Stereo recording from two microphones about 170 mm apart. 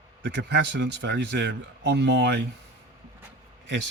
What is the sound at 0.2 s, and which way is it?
Speech, 90° right.